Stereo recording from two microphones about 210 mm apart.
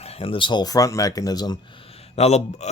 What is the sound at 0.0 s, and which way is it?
Speech, 30° left (ahead or behind).